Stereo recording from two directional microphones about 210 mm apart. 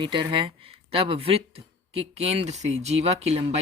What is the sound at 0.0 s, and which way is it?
Speech, 20° right (ahead or behind).